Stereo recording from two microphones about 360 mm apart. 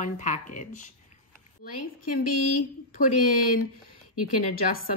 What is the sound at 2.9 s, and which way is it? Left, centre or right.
Speech, left.